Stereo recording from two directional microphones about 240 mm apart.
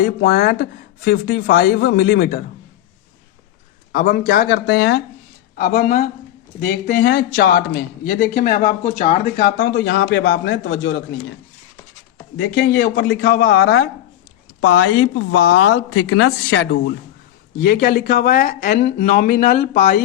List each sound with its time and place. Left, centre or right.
0.0 s speech: left
3.9 s speech: left
5.5 s speech: left
12.4 s speech: left